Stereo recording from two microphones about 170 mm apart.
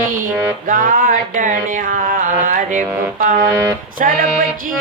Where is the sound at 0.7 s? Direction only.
55° right (ahead or behind).